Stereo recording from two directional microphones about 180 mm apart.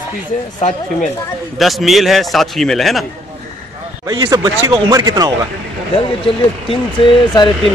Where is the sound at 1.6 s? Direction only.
Centre (ahead or behind).